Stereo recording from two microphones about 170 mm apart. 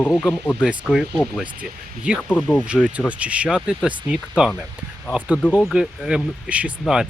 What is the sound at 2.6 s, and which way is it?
Speech, 5° right (ahead or behind).